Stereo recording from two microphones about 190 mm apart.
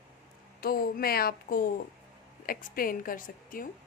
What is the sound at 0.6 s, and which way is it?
A woman's voice, 50° left (ahead or behind).